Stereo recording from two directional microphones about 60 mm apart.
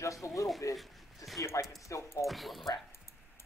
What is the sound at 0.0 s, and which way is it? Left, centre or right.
Speech, left.